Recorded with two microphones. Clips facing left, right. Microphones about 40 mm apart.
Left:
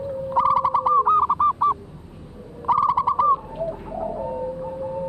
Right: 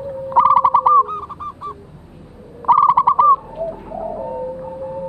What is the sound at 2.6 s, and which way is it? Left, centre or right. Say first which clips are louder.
Bird: right 7 dB; right.